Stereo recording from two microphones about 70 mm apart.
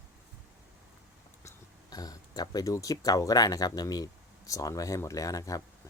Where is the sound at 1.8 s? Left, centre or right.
Left.